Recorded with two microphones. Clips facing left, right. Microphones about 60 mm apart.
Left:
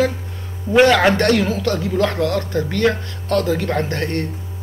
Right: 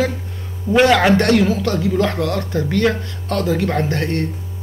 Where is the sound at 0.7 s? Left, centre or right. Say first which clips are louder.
Left 1 dB; left.